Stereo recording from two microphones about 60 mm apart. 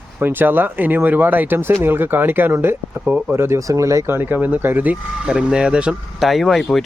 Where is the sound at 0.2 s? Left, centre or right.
Right.